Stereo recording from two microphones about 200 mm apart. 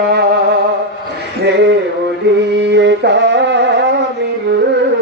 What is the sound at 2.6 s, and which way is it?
Music, 60° right (ahead or behind).